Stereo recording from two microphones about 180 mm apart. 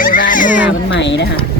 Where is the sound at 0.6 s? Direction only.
80° left.